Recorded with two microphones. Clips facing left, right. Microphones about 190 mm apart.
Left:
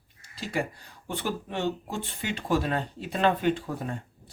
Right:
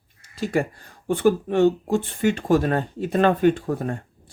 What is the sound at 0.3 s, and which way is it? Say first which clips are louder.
Speech: right 7 dB; 50° right (ahead or behind).